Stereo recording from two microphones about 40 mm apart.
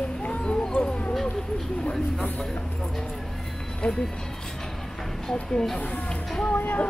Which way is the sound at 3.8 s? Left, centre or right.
Left.